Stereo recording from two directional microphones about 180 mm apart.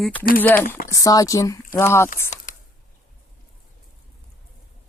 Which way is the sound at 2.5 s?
45° left (ahead or behind).